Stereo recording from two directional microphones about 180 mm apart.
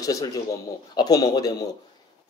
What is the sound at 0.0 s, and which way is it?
A man's voice, 20° left (ahead or behind).